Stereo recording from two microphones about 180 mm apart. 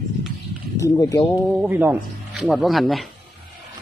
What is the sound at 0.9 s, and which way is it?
Speech, 20° left (ahead or behind).